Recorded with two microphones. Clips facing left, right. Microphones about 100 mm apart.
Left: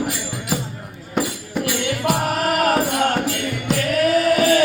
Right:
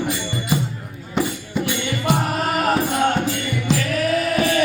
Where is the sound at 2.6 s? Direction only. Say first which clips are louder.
Even; 65° left (ahead or behind).